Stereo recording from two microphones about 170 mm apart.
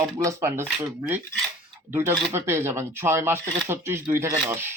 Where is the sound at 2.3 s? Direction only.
15° right (ahead or behind).